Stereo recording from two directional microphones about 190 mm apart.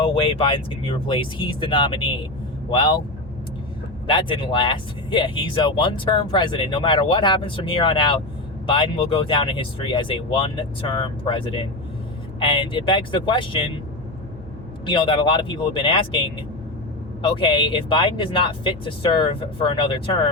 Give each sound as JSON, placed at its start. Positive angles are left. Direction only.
{"t": 0.0, "sound": "speech", "side_deg": 30}
{"t": 4.0, "sound": "speech", "side_deg": 25}
{"t": 14.8, "sound": "speech", "side_deg": 25}
{"t": 17.3, "sound": "speech", "side_deg": 30}